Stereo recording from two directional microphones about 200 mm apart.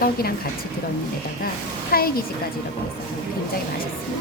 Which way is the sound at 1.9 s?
50° left (ahead or behind).